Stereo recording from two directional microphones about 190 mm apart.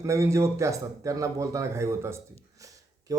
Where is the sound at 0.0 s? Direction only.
15° right (ahead or behind).